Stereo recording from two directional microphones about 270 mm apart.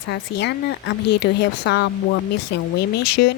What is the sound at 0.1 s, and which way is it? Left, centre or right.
A woman's voice, left.